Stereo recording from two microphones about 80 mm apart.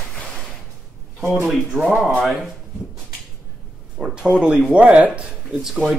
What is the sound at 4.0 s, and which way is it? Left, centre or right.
Speech, centre.